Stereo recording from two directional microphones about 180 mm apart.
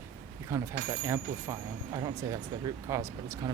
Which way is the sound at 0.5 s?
15° right (ahead or behind).